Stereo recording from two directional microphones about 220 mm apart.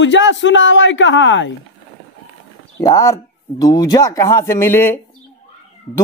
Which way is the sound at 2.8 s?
15° left (ahead or behind).